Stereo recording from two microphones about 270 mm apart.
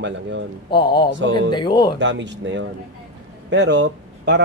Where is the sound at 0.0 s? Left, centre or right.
Right.